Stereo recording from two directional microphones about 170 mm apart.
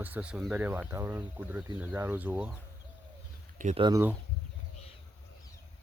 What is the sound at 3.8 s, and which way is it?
Speech, 25° right (ahead or behind).